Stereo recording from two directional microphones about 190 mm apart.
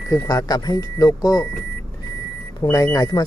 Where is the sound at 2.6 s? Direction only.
20° left (ahead or behind).